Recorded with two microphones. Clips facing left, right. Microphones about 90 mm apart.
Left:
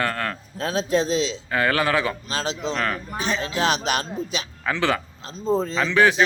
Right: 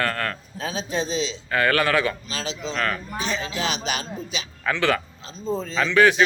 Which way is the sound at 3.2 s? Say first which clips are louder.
Left 5 dB; 50° left (ahead or behind).